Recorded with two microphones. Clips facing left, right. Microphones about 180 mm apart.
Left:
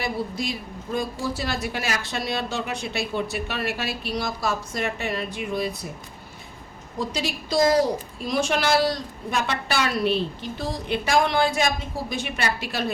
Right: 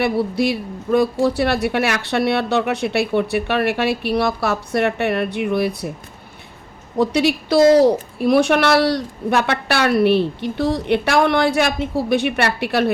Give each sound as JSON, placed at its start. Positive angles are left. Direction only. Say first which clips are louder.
{"t": 0.0, "sound": "a woman's voice", "louder": "right 10 dB", "side_deg": -65}
{"t": 7.0, "sound": "a woman's voice", "louder": "right 11 dB", "side_deg": -65}